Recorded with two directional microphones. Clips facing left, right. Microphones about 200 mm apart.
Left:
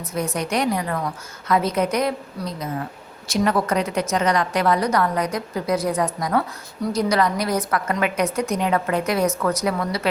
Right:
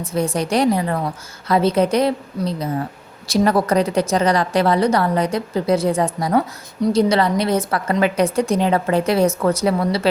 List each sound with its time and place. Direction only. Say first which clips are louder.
0.0 s a woman's voice: right 5 dB; 30° right (ahead or behind)